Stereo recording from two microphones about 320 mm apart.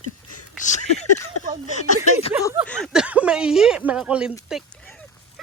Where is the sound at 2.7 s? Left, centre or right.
Centre.